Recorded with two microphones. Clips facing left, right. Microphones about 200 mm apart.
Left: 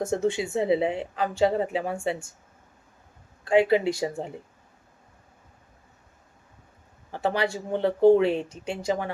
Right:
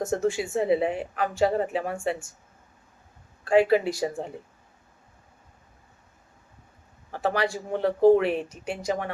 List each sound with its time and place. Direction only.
0.3 s speech: 20° left (ahead or behind)
3.4 s speech: 25° left (ahead or behind)
7.1 s speech: 25° left (ahead or behind)